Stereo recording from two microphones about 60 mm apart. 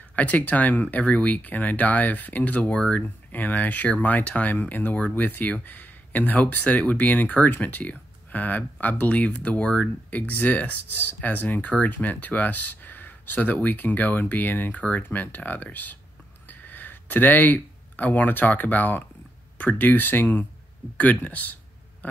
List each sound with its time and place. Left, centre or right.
0.1 s speech: left